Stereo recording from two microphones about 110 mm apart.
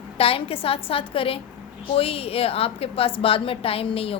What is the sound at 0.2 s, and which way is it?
A woman's voice, 60° left (ahead or behind).